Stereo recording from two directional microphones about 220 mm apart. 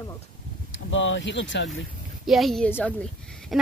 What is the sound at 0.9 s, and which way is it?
Speech, 60° left (ahead or behind).